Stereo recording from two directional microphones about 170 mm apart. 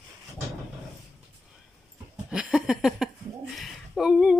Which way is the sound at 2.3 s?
5° right (ahead or behind).